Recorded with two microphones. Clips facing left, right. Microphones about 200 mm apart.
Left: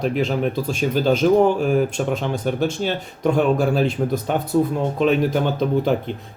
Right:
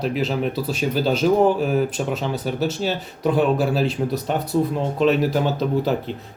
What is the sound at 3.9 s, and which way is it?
Speech, 50° left (ahead or behind).